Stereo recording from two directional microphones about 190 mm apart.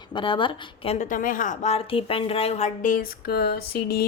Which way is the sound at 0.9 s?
45° left (ahead or behind).